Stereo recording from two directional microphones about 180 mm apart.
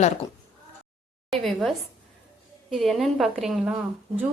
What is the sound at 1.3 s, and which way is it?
A woman's voice, centre (ahead or behind).